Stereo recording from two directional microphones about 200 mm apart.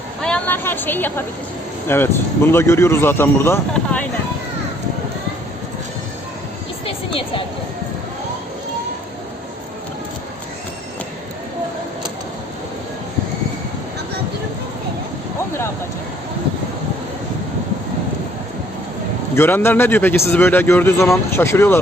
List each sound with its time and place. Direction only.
0.2 s a man's voice: 5° left (ahead or behind)
6.8 s a sound: 25° left (ahead or behind)
19.4 s a man's voice: 10° left (ahead or behind)